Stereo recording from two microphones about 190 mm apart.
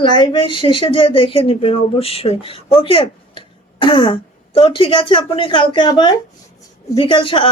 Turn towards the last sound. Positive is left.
turn(degrees=25)  # may be behind; listen again after turning